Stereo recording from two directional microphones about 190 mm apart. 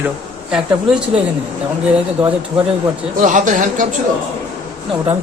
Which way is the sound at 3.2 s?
40° right (ahead or behind).